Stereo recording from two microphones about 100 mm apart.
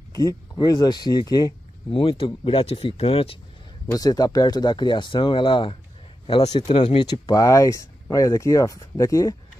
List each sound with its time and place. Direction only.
0.1 s speech: 35° left (ahead or behind)
1.9 s speech: 65° left (ahead or behind)
3.8 s speech: 40° left (ahead or behind); by 6.5 s 65° left (ahead or behind)
6.7 s speech: 75° left (ahead or behind)
7.1 s speech: 40° left (ahead or behind)